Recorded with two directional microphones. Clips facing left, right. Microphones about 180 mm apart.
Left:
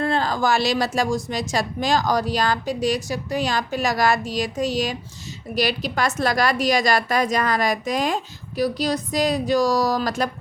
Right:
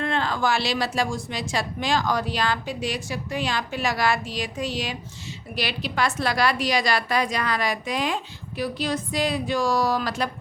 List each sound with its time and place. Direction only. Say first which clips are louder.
0.0 s a woman's voice: left 3 dB; 35° left (ahead or behind)